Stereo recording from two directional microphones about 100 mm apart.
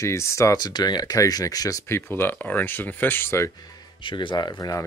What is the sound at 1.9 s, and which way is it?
Speech, 20° left (ahead or behind).